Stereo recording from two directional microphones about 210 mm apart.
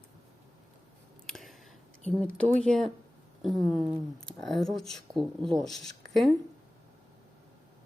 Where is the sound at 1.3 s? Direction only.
Centre (ahead or behind).